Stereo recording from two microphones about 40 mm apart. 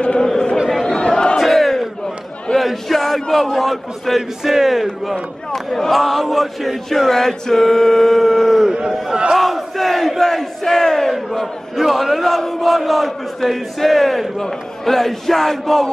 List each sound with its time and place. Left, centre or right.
0.2 s chatter: centre
0.8 s crowd: centre
1.4 s crowd: centre
2.5 s a sound: centre
4.4 s speech: centre
4.8 s speech: centre
8.6 s speech: centre
9.4 s battle cry: centre
11.8 s speech: centre
14.4 s a sound: centre